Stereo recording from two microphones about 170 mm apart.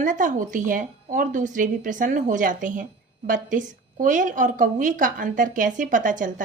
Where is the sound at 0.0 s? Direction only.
50° right (ahead or behind).